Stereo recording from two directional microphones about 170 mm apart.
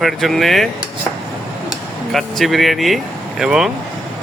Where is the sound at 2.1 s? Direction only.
Centre (ahead or behind).